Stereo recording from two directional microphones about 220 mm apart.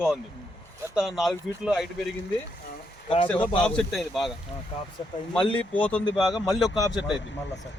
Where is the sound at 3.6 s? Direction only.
5° left (ahead or behind).